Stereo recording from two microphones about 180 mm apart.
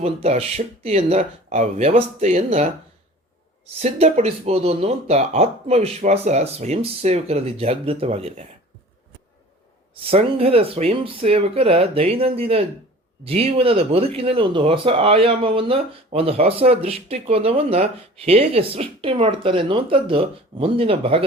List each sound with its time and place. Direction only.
0.0 s speech: 35° right (ahead or behind)
3.8 s speech: 35° right (ahead or behind)
10.1 s speech: 35° right (ahead or behind)